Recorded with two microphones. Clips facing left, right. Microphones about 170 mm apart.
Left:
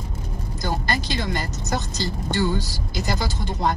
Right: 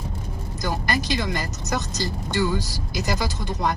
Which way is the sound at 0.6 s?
30° left (ahead or behind).